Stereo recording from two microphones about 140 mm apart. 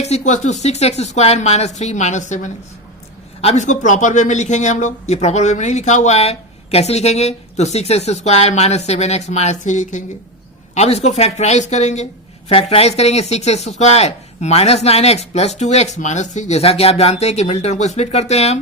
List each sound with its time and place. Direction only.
0.0 s a woman's voice: 55° left (ahead or behind)
10.8 s speech: 50° left (ahead or behind)
12.5 s speech: 45° left (ahead or behind)